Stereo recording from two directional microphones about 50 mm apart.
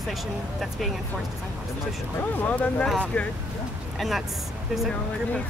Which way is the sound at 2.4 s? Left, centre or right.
Left.